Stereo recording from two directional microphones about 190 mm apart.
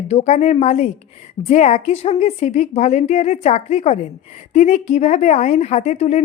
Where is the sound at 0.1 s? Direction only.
35° left (ahead or behind).